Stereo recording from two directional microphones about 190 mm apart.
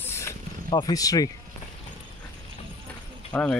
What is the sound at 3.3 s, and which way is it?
Speech, 5° left (ahead or behind).